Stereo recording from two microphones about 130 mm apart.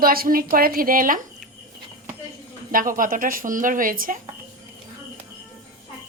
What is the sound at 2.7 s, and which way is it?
A woman's voice, 90° right.